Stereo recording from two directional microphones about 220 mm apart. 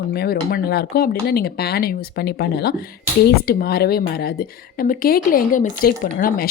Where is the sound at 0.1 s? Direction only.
45° left (ahead or behind).